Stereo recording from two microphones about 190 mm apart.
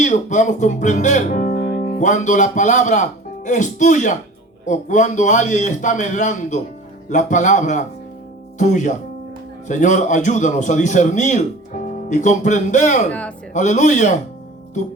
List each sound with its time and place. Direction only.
0.0 s a man's voice: 40° left (ahead or behind)
13.1 s speech: 5° left (ahead or behind)
13.5 s a man's voice: 40° left (ahead or behind)